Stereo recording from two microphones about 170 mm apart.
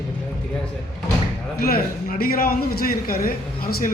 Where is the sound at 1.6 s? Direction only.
60° left (ahead or behind).